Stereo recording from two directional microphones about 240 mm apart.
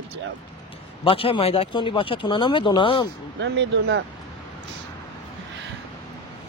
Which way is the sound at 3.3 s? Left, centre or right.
Right.